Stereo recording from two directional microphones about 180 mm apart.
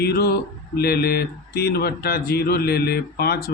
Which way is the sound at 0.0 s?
60° left (ahead or behind).